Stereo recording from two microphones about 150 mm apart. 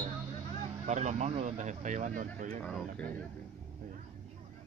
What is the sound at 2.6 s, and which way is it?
Speech, 5° left (ahead or behind).